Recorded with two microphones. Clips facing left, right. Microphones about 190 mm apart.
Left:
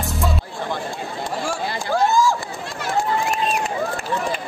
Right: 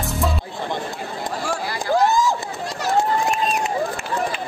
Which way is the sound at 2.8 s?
40° right (ahead or behind).